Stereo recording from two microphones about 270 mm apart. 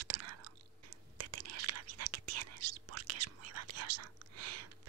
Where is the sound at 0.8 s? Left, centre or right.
Right.